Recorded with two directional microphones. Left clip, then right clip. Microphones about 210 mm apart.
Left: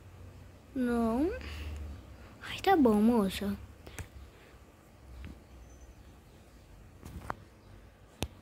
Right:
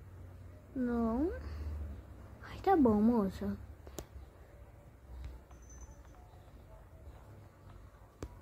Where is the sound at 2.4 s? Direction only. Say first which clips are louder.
Left 3 dB; 10° left (ahead or behind).